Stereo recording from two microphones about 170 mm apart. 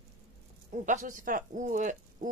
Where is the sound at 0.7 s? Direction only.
50° right (ahead or behind).